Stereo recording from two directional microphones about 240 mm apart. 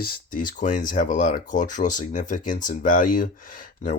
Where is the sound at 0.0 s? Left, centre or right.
Left.